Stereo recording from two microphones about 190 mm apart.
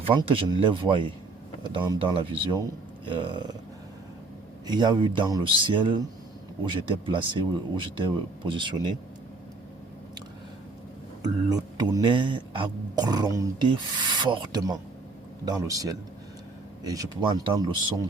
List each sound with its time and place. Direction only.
0.0 s speech: 25° right (ahead or behind)
4.6 s speech: 25° right (ahead or behind)
11.2 s speech: 20° right (ahead or behind)